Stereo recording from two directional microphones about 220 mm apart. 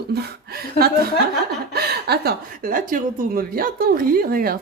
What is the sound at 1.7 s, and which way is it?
A woman's voice, 45° right (ahead or behind).